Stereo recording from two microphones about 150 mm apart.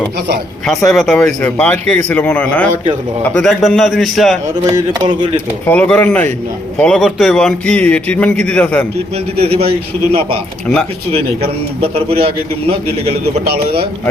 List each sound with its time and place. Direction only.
0.9 s a man's voice: 5° left (ahead or behind)
4.6 s speech: 25° right (ahead or behind)
5.6 s a man's voice: 10° left (ahead or behind)
9.4 s a man's voice: 40° right (ahead or behind)
11.8 s a man's voice: 40° right (ahead or behind)